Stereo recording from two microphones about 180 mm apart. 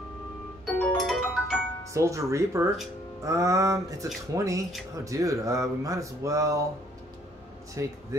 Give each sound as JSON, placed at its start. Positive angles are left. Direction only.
{"t": 0.7, "sound": "music", "side_deg": 0}
{"t": 2.0, "sound": "speech", "side_deg": -15}
{"t": 7.8, "sound": "speech", "side_deg": -15}